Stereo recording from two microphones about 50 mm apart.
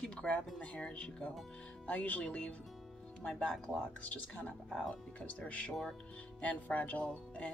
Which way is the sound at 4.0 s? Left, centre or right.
Left.